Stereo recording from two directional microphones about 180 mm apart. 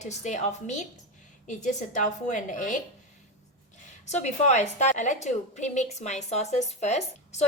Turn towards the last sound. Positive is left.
turn(degrees=40)  # may be behind; listen again after turning